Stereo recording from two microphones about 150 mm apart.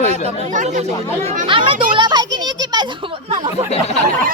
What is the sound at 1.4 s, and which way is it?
Speech, 35° right (ahead or behind).